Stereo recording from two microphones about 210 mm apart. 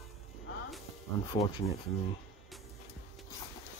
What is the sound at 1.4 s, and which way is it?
Speech, 25° left (ahead or behind).